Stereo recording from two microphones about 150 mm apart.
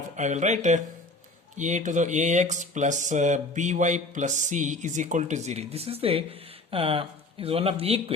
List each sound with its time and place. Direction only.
0.2 s speech: 50° right (ahead or behind)